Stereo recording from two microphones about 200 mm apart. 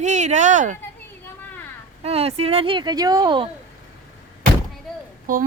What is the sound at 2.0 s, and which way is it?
Speech, 30° right (ahead or behind).